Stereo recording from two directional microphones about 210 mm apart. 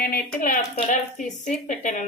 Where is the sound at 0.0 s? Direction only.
40° left (ahead or behind).